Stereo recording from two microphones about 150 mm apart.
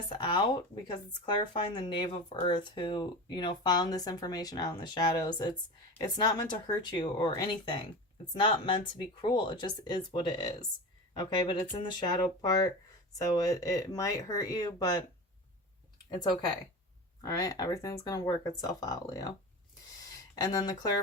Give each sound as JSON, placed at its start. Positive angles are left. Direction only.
{"t": 0.1, "sound": "speech", "side_deg": 30}
{"t": 17.2, "sound": "speech", "side_deg": 25}